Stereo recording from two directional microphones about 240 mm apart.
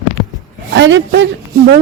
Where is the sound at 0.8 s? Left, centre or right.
Right.